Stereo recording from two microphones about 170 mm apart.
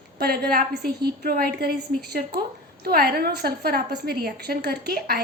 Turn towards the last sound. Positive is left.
turn(degrees=-65)  # may be behind; listen again after turning